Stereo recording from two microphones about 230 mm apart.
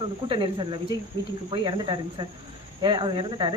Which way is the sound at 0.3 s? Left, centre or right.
Centre.